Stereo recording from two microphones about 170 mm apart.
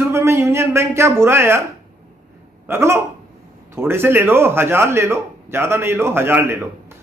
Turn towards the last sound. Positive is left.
turn(degrees=-15)  # may be behind; listen again after turning